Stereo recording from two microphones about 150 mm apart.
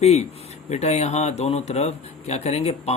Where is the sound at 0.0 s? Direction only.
45° left (ahead or behind).